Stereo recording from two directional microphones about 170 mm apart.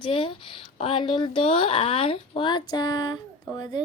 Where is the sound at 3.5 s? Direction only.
25° left (ahead or behind).